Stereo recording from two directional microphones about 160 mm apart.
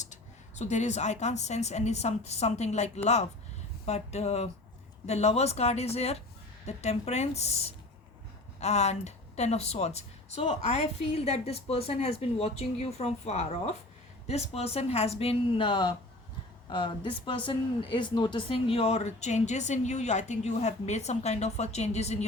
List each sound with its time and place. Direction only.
0.0 s a woman's voice: 45° left (ahead or behind)